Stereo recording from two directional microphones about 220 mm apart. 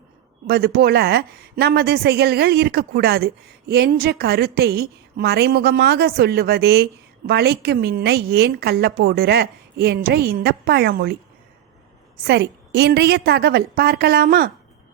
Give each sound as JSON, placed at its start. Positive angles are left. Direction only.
{"t": 0.4, "sound": "a woman's voice", "side_deg": -45}